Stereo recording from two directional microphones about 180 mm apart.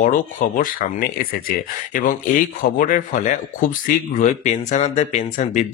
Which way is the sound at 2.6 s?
45° left (ahead or behind).